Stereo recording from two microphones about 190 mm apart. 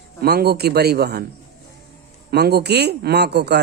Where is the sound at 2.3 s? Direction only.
60° right (ahead or behind).